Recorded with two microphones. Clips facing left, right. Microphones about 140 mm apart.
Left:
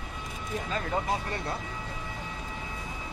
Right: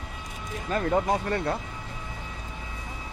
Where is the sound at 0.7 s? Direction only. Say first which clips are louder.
Right 7 dB; 45° right (ahead or behind).